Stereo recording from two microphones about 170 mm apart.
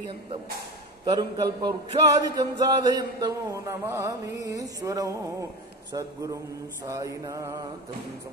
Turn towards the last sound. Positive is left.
turn(degrees=-20)  # may be behind; listen again after turning